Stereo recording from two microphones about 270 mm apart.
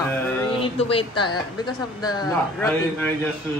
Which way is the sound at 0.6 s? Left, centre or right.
Left.